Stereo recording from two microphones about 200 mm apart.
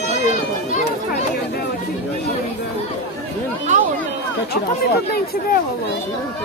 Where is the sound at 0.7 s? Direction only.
35° left (ahead or behind).